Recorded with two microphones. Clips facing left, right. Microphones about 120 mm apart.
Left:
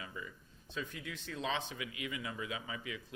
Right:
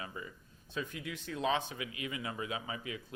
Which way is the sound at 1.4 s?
50° right (ahead or behind).